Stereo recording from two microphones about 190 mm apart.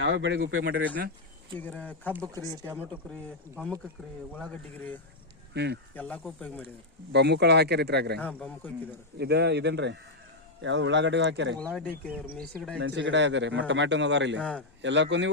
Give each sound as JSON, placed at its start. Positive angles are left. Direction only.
{"t": 0.0, "sound": "speech", "side_deg": -65}
{"t": 1.5, "sound": "speech", "side_deg": 10}
{"t": 2.1, "sound": "speech", "side_deg": -20}
{"t": 4.3, "sound": "speech", "side_deg": 10}
{"t": 5.5, "sound": "speech", "side_deg": -60}
{"t": 5.9, "sound": "speech", "side_deg": 10}
{"t": 7.1, "sound": "speech", "side_deg": -65}
{"t": 8.2, "sound": "speech", "side_deg": 5}
{"t": 9.1, "sound": "speech", "side_deg": -60}
{"t": 11.6, "sound": "speech", "side_deg": 5}
{"t": 12.0, "sound": "speech", "side_deg": -5}
{"t": 12.8, "sound": "speech", "side_deg": -75}